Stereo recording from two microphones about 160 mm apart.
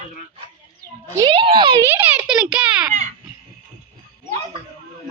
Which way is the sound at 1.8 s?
10° right (ahead or behind).